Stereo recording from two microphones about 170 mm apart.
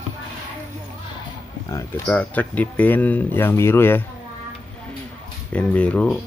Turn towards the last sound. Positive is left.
turn(degrees=5)  # may be behind; listen again after turning